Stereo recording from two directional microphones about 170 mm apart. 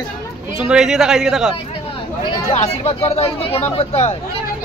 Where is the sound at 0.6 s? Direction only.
5° right (ahead or behind).